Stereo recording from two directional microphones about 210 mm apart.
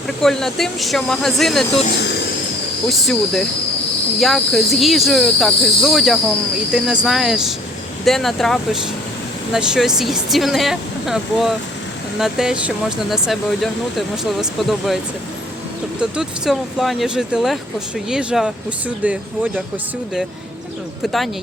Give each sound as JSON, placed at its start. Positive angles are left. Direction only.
{"t": 0.2, "sound": "speech", "side_deg": 0}
{"t": 1.9, "sound": "vehicle", "side_deg": 55}
{"t": 3.0, "sound": "speech", "side_deg": 0}
{"t": 16.0, "sound": "speech", "side_deg": -5}
{"t": 21.0, "sound": "speech", "side_deg": 0}